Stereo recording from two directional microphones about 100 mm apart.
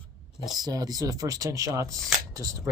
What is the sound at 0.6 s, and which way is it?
Speech, 40° right (ahead or behind).